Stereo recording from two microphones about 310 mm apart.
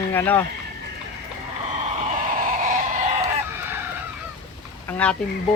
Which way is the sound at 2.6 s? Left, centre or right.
Right.